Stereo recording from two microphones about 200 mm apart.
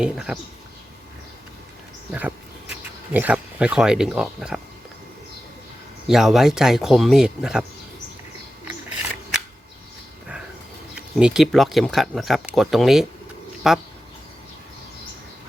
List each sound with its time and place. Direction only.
0.0 s speech: 5° right (ahead or behind)
3.1 s speech: 10° right (ahead or behind)
6.1 s speech: centre (ahead or behind)
10.9 s speech: 5° right (ahead or behind)